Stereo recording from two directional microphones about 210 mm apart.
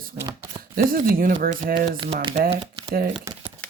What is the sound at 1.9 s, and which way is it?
Speech, 25° right (ahead or behind).